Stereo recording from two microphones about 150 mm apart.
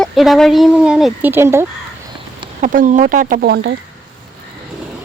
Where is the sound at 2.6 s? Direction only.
55° right (ahead or behind); by 3.6 s 75° right (ahead or behind).